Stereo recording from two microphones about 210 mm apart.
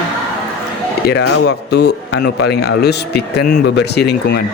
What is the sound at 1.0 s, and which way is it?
Speech, 55° left (ahead or behind).